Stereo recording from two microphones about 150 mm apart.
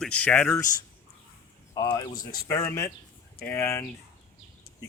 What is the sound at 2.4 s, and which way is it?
Speech, 20° left (ahead or behind).